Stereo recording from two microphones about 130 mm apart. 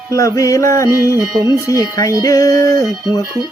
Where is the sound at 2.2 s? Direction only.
25° left (ahead or behind).